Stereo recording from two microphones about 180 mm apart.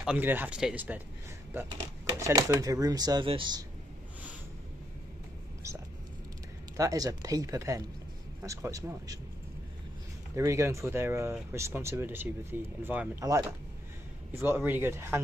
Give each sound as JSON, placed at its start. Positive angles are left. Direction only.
{"t": 0.0, "sound": "speech", "side_deg": -10}
{"t": 6.8, "sound": "speech", "side_deg": -20}
{"t": 10.3, "sound": "speech", "side_deg": -15}
{"t": 14.3, "sound": "speech", "side_deg": -10}